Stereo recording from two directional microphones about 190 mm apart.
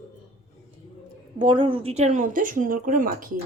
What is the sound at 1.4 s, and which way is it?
Speech, 25° right (ahead or behind).